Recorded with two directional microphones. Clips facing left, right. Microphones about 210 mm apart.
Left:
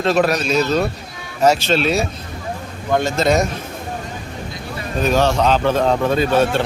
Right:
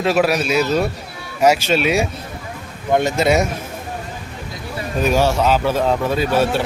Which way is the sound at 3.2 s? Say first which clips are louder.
Left 2 dB; 10° right (ahead or behind).